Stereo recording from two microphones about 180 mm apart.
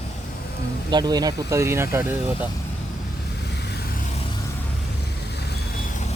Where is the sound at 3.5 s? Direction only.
65° left (ahead or behind).